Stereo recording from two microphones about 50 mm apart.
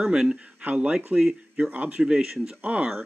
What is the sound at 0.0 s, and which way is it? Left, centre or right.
Speech, centre.